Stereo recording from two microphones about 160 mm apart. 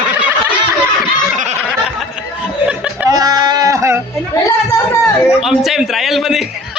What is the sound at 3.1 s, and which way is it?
Sheep, 25° right (ahead or behind).